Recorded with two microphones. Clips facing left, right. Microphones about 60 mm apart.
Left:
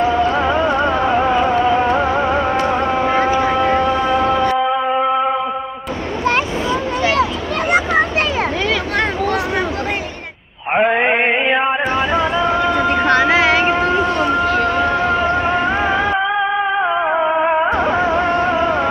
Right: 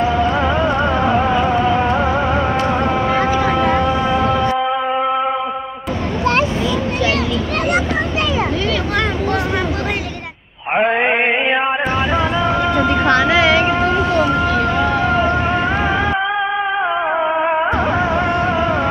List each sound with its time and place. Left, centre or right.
0.0 s music: centre
2.6 s a sound: centre
10.7 s music: centre
13.1 s vehicle: left
13.7 s vehicle: centre
14.7 s a sound: left
15.0 s music: centre